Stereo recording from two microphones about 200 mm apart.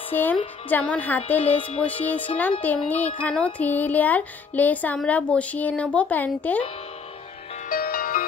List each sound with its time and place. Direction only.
0.1 s speech: 10° left (ahead or behind)
1.5 s music: 30° left (ahead or behind)
1.9 s speech: 10° left (ahead or behind)
7.7 s music: 45° left (ahead or behind)